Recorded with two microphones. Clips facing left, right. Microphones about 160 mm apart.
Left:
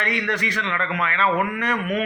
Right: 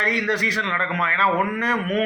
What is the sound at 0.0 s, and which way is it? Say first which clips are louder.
A man's voice: right 2 dB; 35° right (ahead or behind).